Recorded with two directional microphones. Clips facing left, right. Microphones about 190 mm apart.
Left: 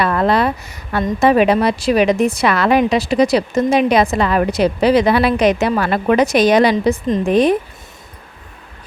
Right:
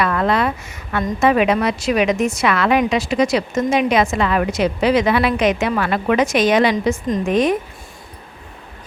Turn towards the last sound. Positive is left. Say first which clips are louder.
# left 3 dB
turn(degrees=35)  # may be behind; listen again after turning